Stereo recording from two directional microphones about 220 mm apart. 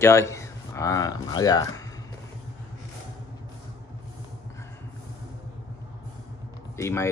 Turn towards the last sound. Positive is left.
turn(degrees=10)  # may be behind; listen again after turning